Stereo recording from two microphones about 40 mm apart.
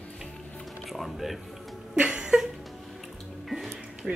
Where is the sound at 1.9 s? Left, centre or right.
Right.